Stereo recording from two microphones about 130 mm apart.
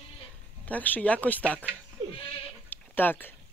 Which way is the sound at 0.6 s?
10° left (ahead or behind).